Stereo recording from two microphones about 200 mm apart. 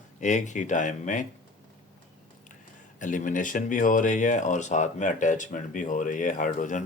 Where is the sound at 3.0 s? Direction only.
40° left (ahead or behind).